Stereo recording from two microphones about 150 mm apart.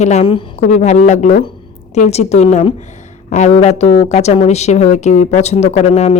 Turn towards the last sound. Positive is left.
turn(degrees=50)  # may be behind; listen again after turning